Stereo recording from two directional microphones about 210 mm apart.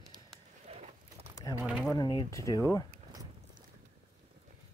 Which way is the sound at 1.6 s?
5° right (ahead or behind).